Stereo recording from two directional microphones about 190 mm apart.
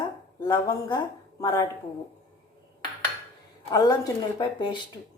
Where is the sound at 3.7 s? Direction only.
20° left (ahead or behind).